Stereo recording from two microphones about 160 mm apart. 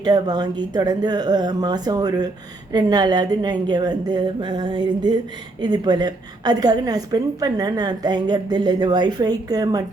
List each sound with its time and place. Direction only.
0.0 s a woman's voice: 25° right (ahead or behind)